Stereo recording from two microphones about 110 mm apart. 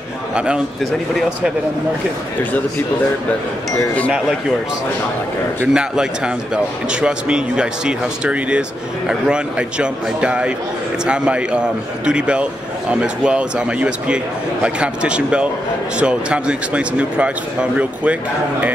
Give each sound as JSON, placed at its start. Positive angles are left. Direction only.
{"t": 0.3, "sound": "a man's voice", "side_deg": -10}
{"t": 3.7, "sound": "speech", "side_deg": 10}
{"t": 5.7, "sound": "a man's voice", "side_deg": -5}